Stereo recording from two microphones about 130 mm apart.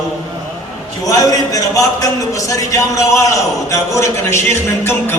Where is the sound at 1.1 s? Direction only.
30° left (ahead or behind).